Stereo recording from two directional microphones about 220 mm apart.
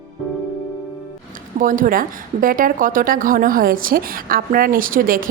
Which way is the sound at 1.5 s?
35° right (ahead or behind).